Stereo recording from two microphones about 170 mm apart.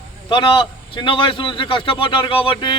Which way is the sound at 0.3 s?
30° left (ahead or behind).